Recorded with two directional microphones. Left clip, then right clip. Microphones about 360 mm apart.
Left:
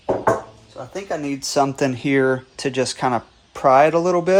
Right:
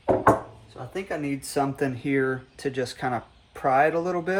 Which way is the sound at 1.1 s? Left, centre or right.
Centre.